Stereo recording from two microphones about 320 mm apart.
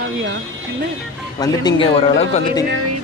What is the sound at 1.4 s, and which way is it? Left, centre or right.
Speech, centre.